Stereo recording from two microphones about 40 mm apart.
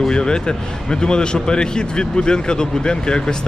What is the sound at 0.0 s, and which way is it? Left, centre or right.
Speech, left.